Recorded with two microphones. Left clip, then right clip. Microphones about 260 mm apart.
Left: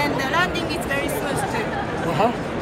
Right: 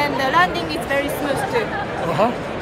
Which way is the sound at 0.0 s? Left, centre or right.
Right.